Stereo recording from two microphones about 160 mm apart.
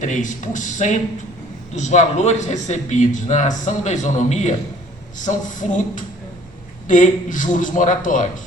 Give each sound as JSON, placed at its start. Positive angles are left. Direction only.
{"t": 0.0, "sound": "speech", "side_deg": 50}